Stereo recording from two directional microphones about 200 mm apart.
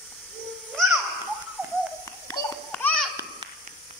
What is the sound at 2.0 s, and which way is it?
Children playing, 15° left (ahead or behind).